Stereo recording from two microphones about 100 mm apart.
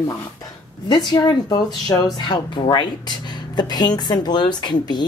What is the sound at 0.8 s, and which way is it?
Speech, 45° left (ahead or behind).